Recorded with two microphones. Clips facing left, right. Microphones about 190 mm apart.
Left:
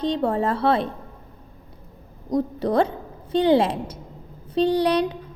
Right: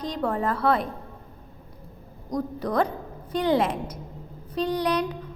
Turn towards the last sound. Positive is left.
turn(degrees=30)  # may be behind; listen again after turning